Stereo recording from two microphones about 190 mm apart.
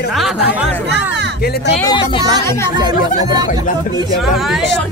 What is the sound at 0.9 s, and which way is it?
Speech, 65° right (ahead or behind).